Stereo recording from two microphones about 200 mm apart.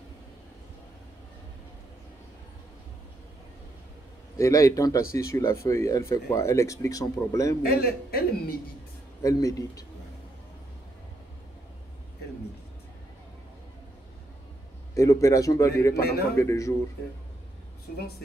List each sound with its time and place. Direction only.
4.4 s speech: 15° left (ahead or behind)
7.6 s a man's voice: 50° left (ahead or behind)
9.2 s speech: 15° left (ahead or behind)
15.0 s speech: 15° left (ahead or behind)
15.9 s a man's voice: 50° left (ahead or behind)
16.3 s speech: 15° left (ahead or behind)